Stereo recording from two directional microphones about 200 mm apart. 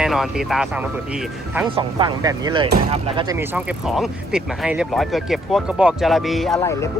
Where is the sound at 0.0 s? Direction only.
Centre (ahead or behind).